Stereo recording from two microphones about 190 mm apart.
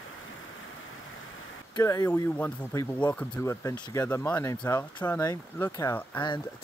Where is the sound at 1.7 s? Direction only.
20° left (ahead or behind).